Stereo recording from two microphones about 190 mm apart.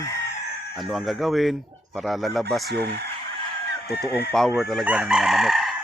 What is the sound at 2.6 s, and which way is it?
Speech, 60° right (ahead or behind).